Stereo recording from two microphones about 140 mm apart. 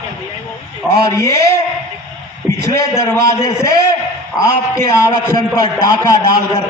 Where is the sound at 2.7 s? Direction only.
20° left (ahead or behind).